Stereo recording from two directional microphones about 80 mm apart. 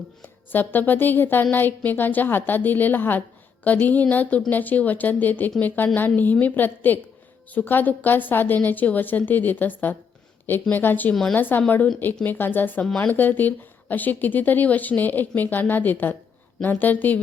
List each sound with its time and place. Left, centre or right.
0.5 s a woman's voice: left
11.1 s speech: centre
11.3 s a woman's voice: left